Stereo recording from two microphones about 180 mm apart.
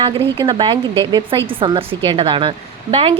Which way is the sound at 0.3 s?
25° right (ahead or behind).